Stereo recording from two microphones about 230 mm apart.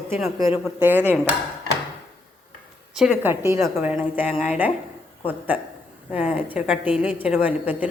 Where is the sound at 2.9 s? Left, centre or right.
Centre.